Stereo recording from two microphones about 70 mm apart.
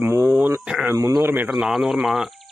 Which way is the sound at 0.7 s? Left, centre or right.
Centre.